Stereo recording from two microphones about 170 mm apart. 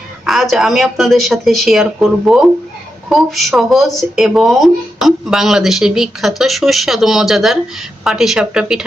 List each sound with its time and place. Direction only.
0.3 s speech: centre (ahead or behind)